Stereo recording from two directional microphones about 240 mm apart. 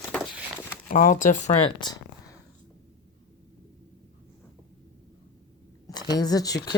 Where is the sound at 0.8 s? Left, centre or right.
Left.